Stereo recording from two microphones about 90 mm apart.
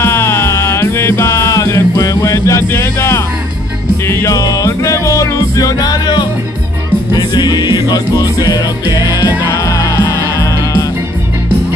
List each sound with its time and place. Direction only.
0.0 s music: 30° left (ahead or behind)
4.3 s music: 40° left (ahead or behind)